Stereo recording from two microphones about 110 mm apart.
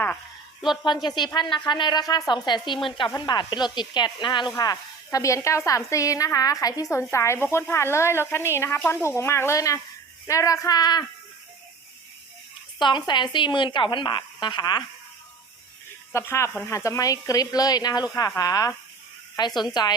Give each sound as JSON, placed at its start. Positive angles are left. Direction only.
{"t": 1.0, "sound": "a woman's voice", "side_deg": 40}
{"t": 12.8, "sound": "a woman's voice", "side_deg": 45}
{"t": 16.1, "sound": "a woman's voice", "side_deg": 25}